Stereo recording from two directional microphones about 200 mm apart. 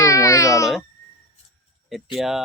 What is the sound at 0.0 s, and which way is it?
Baby cry, 15° left (ahead or behind).